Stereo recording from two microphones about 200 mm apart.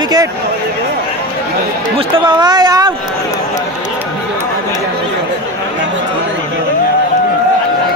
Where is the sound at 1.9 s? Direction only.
20° right (ahead or behind).